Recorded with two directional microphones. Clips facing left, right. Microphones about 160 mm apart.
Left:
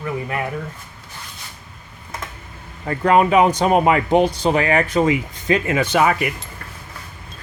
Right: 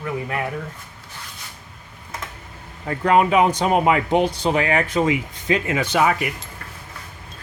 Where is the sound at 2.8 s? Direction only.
50° left (ahead or behind); by 6.3 s 65° left (ahead or behind).